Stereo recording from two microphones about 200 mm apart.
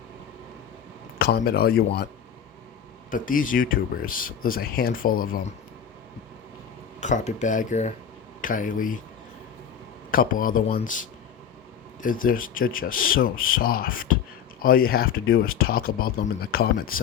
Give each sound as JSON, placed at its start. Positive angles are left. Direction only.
{"t": 1.2, "sound": "speech", "side_deg": 50}
{"t": 3.1, "sound": "speech", "side_deg": 45}
{"t": 7.0, "sound": "speech", "side_deg": 35}
{"t": 10.1, "sound": "speech", "side_deg": 45}
{"t": 12.0, "sound": "speech", "side_deg": 45}